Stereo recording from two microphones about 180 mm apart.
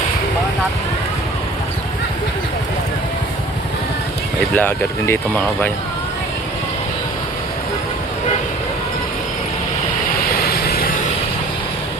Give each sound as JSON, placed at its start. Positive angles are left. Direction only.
{"t": 4.5, "sound": "speech", "side_deg": 10}
{"t": 10.3, "sound": "vehicle", "side_deg": 60}